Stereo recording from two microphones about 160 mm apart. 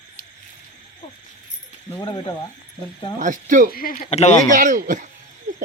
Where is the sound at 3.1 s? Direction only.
55° right (ahead or behind).